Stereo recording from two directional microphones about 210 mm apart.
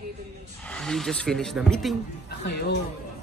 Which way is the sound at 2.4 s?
50° left (ahead or behind).